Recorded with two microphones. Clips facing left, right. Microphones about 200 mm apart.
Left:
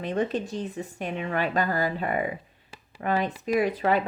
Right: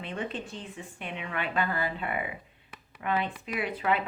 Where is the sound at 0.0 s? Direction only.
40° left (ahead or behind).